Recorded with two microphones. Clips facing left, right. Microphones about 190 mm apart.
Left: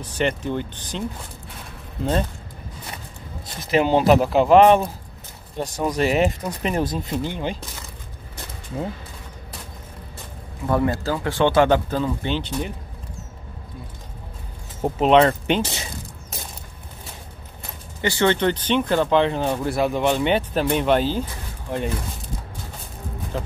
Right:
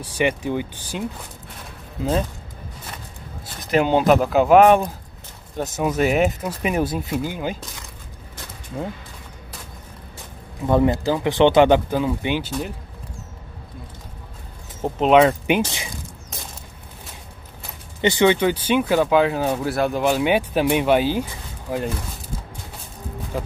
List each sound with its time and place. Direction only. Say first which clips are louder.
0.0 s speech: right 2 dB; 10° right (ahead or behind)
3.7 s speech: even; centre (ahead or behind)
10.7 s speech: right 3 dB; 20° right (ahead or behind); by 12.7 s centre (ahead or behind)
15.0 s speech: right 1 dB; 5° right (ahead or behind)
18.0 s speech: right 3 dB; 15° right (ahead or behind)
23.3 s speech: right 1 dB; 10° right (ahead or behind)